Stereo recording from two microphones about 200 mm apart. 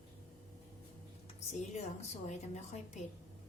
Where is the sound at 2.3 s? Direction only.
35° left (ahead or behind).